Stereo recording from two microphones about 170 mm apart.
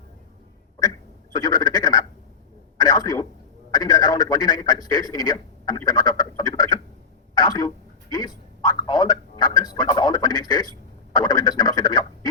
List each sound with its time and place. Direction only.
1.3 s quack: 25° left (ahead or behind)
2.8 s a sound: 20° left (ahead or behind)
3.7 s a man's voice: 25° left (ahead or behind)